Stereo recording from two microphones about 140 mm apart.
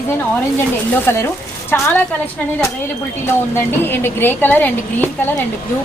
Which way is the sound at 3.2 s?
15° left (ahead or behind).